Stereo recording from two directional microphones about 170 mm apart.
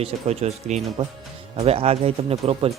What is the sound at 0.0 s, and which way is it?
Speech, 40° right (ahead or behind).